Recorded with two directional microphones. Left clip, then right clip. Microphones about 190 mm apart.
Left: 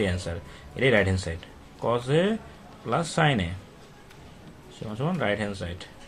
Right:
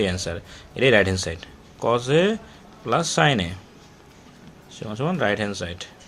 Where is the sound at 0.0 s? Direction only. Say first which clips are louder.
Right 4 dB; 35° right (ahead or behind).